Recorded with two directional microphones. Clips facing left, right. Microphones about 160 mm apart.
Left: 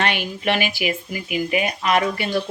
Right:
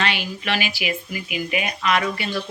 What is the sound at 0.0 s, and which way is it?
Speech, 50° left (ahead or behind).